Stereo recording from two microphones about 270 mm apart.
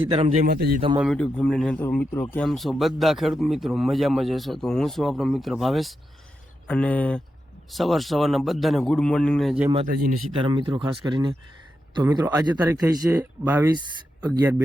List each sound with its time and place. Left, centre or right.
0.1 s a man's voice: centre
0.4 s a man's voice: right
0.9 s a man's voice: centre
10.3 s speech: centre